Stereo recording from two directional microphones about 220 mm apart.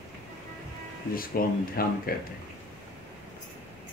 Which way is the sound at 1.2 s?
40° left (ahead or behind).